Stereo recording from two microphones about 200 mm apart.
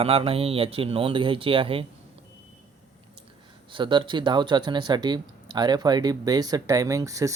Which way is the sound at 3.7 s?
25° right (ahead or behind).